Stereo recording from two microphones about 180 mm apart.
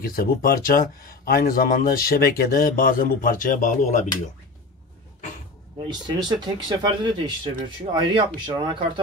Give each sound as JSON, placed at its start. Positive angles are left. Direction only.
{"t": 0.0, "sound": "speech", "side_deg": 55}
{"t": 5.9, "sound": "speech", "side_deg": -25}